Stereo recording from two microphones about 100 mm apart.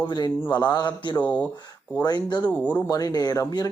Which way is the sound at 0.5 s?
45° left (ahead or behind).